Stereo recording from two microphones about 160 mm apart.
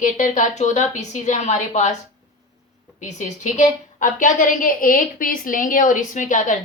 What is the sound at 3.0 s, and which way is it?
A woman's voice, 50° left (ahead or behind).